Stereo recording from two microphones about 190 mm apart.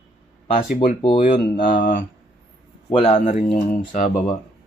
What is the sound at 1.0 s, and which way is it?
Speech, 25° left (ahead or behind).